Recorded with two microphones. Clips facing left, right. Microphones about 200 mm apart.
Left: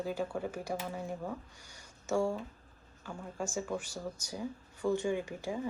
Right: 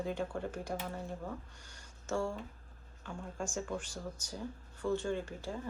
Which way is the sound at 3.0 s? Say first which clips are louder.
Left 2 dB; 5° left (ahead or behind).